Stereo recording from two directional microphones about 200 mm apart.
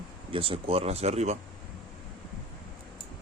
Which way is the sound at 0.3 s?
25° right (ahead or behind).